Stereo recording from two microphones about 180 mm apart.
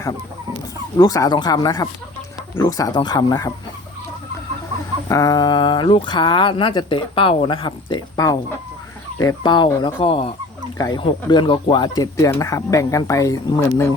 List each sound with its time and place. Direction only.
0.9 s speech: 20° left (ahead or behind)
5.0 s speech: 20° left (ahead or behind)